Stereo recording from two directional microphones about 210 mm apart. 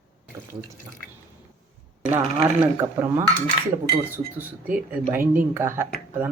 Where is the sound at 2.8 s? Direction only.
10° right (ahead or behind).